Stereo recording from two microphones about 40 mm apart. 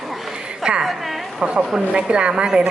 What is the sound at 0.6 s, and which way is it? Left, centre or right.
A woman's voice, right.